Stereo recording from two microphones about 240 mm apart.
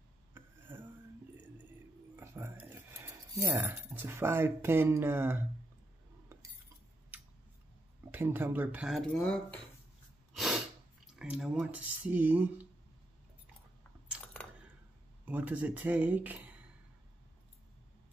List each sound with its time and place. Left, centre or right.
0.7 s a sound: centre
2.1 s speech: centre
7.1 s scissors: centre
8.1 s speech: centre
10.3 s sneeze: centre
11.1 s speech: centre
14.0 s coin: centre
15.2 s speech: centre